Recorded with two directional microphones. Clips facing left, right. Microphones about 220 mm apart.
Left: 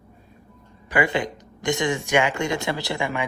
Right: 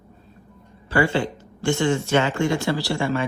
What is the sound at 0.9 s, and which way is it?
Speech, 15° left (ahead or behind).